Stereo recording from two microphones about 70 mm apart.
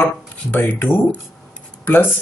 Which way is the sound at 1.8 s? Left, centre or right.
Left.